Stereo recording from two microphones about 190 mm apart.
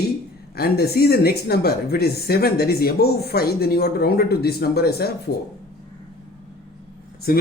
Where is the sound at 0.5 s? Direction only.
55° left (ahead or behind).